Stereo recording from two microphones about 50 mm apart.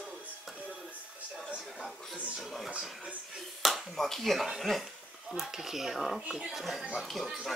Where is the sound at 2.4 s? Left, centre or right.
Centre.